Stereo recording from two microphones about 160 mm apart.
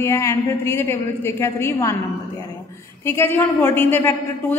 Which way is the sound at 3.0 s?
15° left (ahead or behind).